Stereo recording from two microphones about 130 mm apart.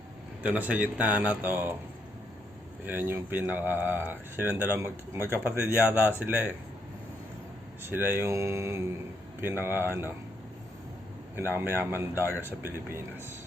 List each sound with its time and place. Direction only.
0.4 s speech: 10° right (ahead or behind)
2.8 s speech: 15° right (ahead or behind)
7.9 s speech: 15° right (ahead or behind)
11.3 s speech: 15° right (ahead or behind)